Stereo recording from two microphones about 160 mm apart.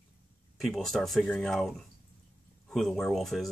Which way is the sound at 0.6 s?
Centre (ahead or behind).